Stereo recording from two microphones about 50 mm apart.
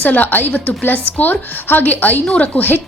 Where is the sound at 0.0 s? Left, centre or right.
Left.